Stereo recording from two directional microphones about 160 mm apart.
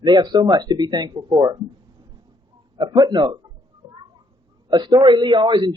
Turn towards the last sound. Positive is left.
turn(degrees=-30)  # may be behind; listen again after turning